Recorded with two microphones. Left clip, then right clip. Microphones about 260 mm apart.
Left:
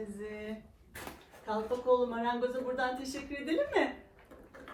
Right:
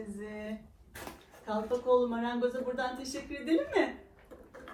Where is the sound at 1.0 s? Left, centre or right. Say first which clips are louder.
Even; centre.